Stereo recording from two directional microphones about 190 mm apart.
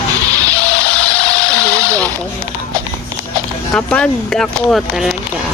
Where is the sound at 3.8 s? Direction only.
5° left (ahead or behind).